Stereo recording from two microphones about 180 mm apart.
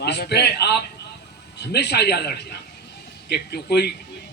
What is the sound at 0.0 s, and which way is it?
A man's voice, 65° left (ahead or behind).